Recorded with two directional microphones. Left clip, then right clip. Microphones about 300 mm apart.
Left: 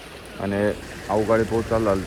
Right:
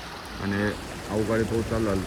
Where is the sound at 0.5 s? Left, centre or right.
Centre.